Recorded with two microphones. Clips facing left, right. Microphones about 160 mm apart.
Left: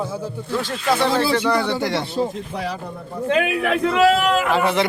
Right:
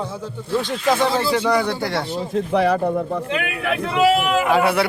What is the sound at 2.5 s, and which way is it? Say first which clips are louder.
Speech: right 10 dB; 65° right (ahead or behind).